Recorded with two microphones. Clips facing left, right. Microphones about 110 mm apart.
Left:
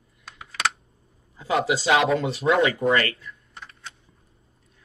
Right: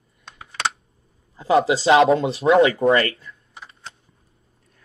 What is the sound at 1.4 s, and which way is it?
Speech, 30° right (ahead or behind).